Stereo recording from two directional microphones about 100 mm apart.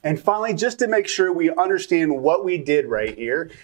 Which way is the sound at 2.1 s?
25° right (ahead or behind).